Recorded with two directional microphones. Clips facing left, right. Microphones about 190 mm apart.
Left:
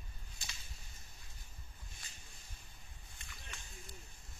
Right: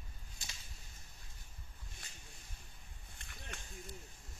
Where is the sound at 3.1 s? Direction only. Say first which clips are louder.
Right 4 dB; 55° right (ahead or behind).